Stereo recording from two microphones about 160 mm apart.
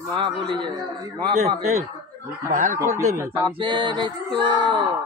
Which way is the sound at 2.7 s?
15° right (ahead or behind).